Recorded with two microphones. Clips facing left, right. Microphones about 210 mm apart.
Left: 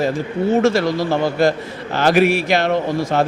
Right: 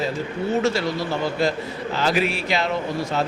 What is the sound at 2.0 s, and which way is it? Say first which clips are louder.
A man's voice: left 8 dB; 70° left (ahead or behind).